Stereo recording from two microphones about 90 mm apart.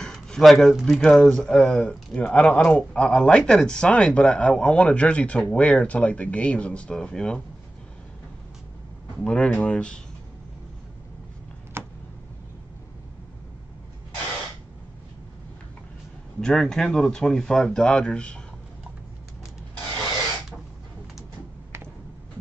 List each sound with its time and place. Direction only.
0.0 s speech: 5° left (ahead or behind)
9.2 s speech: 10° left (ahead or behind)
11.7 s a sound: 25° right (ahead or behind)
16.3 s speech: 5° left (ahead or behind)